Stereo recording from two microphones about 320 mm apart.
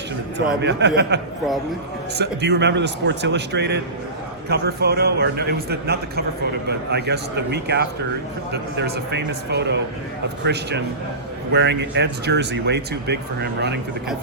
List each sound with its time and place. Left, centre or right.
0.6 s a man's voice: right